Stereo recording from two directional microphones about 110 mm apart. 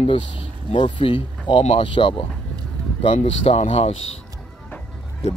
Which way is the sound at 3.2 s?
75° left (ahead or behind).